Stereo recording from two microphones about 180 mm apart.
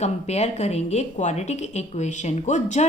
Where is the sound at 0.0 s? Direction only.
40° left (ahead or behind).